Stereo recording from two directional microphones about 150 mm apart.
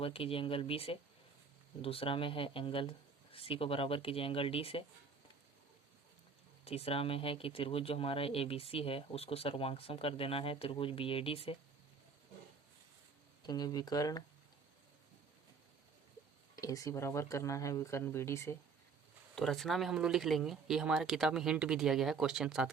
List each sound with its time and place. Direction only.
0.0 s speech: 40° left (ahead or behind)
6.7 s speech: 40° left (ahead or behind)
13.4 s speech: 30° left (ahead or behind)
16.6 s speech: 20° left (ahead or behind)
19.4 s speech: centre (ahead or behind)